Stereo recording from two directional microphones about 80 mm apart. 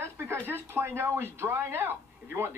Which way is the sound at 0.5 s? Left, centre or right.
Right.